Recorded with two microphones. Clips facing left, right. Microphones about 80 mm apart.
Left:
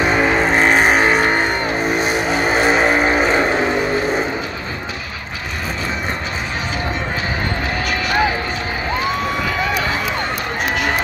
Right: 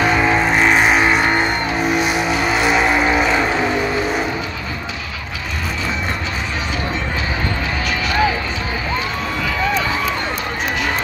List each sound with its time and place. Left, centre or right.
0.1 s vehicle: left
0.5 s vehicle: left